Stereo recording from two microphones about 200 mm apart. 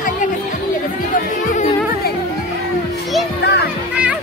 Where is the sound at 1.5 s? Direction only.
40° left (ahead or behind).